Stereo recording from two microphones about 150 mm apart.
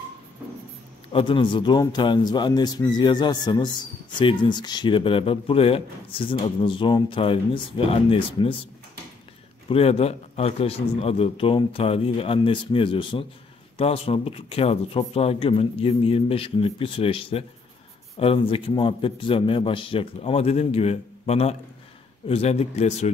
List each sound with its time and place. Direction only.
1.1 s speech: 35° left (ahead or behind)
9.7 s speech: 40° left (ahead or behind)